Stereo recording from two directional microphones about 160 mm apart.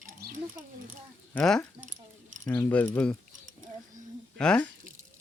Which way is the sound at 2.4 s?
20° left (ahead or behind).